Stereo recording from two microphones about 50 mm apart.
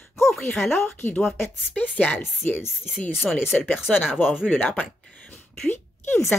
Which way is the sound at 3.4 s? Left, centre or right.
Centre.